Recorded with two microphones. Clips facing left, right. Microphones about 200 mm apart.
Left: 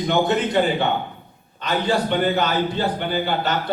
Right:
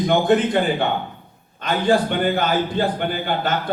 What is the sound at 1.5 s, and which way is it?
A man's voice, 50° right (ahead or behind).